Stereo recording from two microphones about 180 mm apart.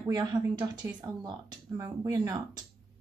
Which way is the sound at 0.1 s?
20° right (ahead or behind).